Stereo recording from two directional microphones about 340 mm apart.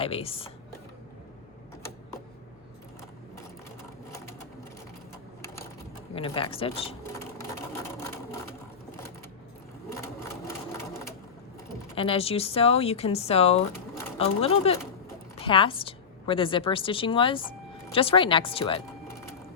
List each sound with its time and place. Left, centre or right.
0.0 s speech: centre
4.1 s sewing machine: centre
6.1 s sewing machine: centre
11.9 s a woman's voice: centre